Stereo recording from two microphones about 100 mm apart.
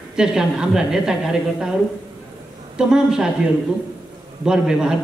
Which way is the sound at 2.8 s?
5° right (ahead or behind).